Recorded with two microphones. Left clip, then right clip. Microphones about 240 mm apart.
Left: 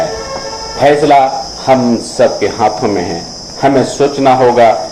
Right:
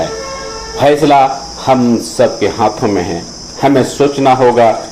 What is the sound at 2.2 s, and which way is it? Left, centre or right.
Speech, right.